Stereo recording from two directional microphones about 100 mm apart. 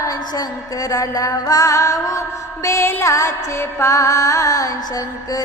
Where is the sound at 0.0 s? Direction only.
35° left (ahead or behind).